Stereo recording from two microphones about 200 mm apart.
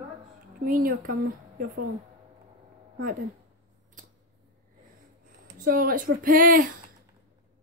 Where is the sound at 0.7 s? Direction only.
45° right (ahead or behind).